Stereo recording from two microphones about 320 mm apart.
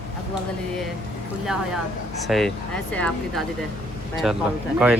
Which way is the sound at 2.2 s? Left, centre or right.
Centre.